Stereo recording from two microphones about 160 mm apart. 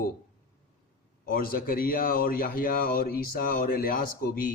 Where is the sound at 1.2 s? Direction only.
65° left (ahead or behind).